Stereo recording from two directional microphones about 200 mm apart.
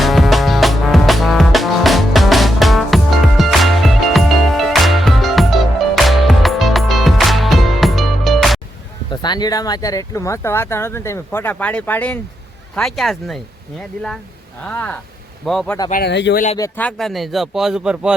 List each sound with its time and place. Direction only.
0.0 s music: centre (ahead or behind)
9.0 s a man's voice: 20° left (ahead or behind); by 13.4 s centre (ahead or behind)
14.6 s a man's voice: 5° left (ahead or behind)
15.9 s speech: 55° left (ahead or behind)
16.6 s a man's voice: 10° left (ahead or behind); by 18.1 s 5° right (ahead or behind)